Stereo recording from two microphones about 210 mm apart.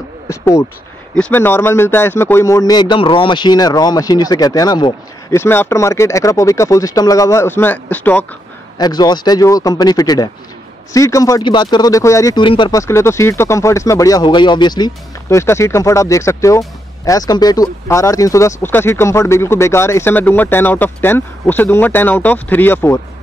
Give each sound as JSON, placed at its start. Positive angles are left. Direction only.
{"t": 0.3, "sound": "a sound", "side_deg": 15}
{"t": 1.1, "sound": "speech", "side_deg": 5}
{"t": 8.7, "sound": "speech", "side_deg": 20}